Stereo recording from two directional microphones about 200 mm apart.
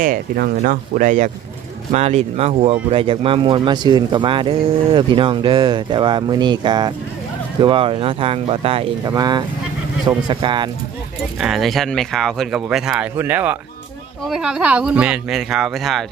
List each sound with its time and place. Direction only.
0.0 s speech: 45° right (ahead or behind); by 10.7 s 25° right (ahead or behind)
11.3 s speech: centre (ahead or behind)